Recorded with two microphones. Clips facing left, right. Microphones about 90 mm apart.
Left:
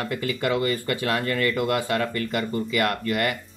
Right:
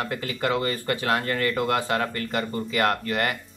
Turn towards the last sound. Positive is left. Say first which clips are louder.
# even
turn(degrees=-30)  # may be behind; listen again after turning